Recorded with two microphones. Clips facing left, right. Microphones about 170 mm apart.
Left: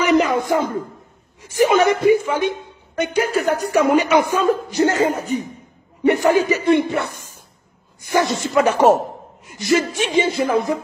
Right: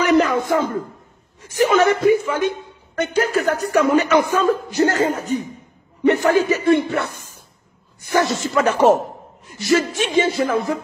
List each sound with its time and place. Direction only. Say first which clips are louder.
0.0 s a sound: even; 10° left (ahead or behind)
1.6 s a man's voice: even; 15° left (ahead or behind)
8.1 s a man's voice: even; 15° left (ahead or behind)